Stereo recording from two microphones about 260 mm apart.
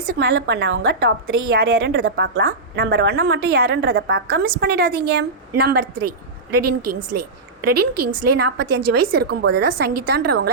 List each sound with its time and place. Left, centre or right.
0.1 s a woman's voice: right
6.6 s a woman's voice: right
8.4 s a woman's voice: right